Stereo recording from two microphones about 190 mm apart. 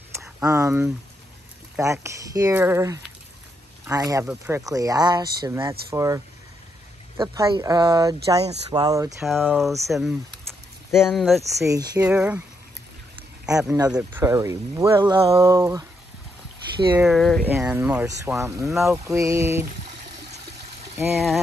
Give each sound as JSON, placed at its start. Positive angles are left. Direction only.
{"t": 0.4, "sound": "speech", "side_deg": -15}
{"t": 9.2, "sound": "speech", "side_deg": -5}
{"t": 9.8, "sound": "speech", "side_deg": 0}
{"t": 11.5, "sound": "speech", "side_deg": -15}
{"t": 12.0, "sound": "speech", "side_deg": -5}
{"t": 13.7, "sound": "speech", "side_deg": -20}
{"t": 16.9, "sound": "speech", "side_deg": 0}
{"t": 17.5, "sound": "speech", "side_deg": -10}
{"t": 19.0, "sound": "speech", "side_deg": -15}